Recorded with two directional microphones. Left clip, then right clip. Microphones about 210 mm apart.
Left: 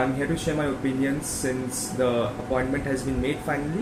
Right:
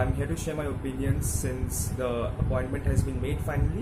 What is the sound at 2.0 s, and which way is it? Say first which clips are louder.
Speech: left 7 dB; 10° right (ahead or behind).